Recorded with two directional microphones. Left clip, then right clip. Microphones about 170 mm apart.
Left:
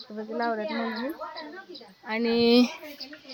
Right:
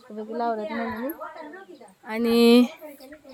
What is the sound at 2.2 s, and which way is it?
Speech, 60° right (ahead or behind).